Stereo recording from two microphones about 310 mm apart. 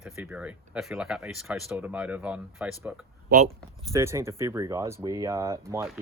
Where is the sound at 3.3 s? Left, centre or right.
Right.